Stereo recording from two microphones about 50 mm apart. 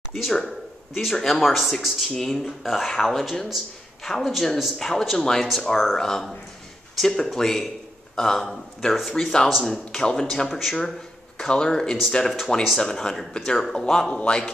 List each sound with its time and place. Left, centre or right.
0.1 s speech: centre
9.1 s speech: centre
14.1 s speech: left